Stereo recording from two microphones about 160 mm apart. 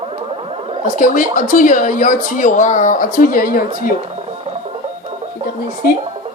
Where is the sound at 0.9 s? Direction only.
60° left (ahead or behind).